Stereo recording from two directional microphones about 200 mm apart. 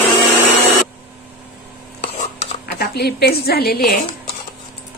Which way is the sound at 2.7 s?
55° left (ahead or behind).